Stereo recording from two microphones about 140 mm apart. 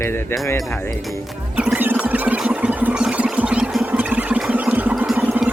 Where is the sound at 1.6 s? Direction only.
10° right (ahead or behind).